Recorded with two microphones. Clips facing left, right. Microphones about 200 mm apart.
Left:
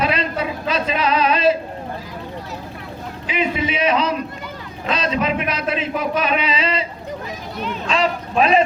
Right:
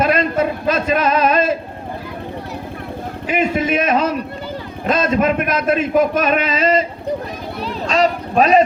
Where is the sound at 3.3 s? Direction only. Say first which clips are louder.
Right 4 dB; 50° right (ahead or behind).